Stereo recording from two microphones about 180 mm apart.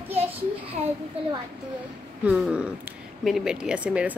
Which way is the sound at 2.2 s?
5° right (ahead or behind).